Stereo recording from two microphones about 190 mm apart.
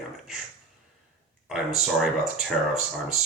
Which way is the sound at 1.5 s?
Centre (ahead or behind).